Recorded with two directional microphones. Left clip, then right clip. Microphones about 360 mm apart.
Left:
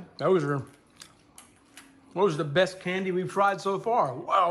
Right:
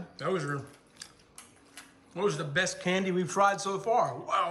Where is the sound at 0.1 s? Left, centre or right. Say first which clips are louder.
Left 7 dB; centre.